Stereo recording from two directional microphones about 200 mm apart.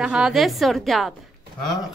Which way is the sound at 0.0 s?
5° right (ahead or behind).